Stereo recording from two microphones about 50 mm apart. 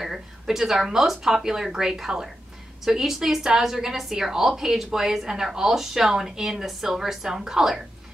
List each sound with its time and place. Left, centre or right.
0.0 s a woman's voice: centre